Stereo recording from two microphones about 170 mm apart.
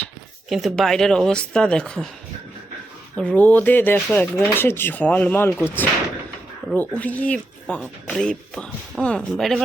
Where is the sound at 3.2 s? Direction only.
10° left (ahead or behind).